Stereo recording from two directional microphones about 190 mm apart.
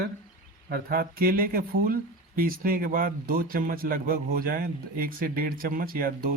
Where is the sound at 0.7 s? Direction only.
50° right (ahead or behind).